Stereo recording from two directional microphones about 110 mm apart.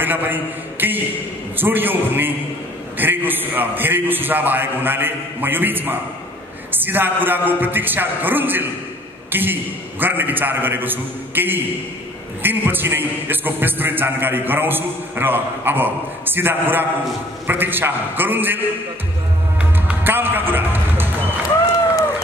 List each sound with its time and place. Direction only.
0.0 s a man's voice: 15° right (ahead or behind)
19.6 s music: 15° right (ahead or behind)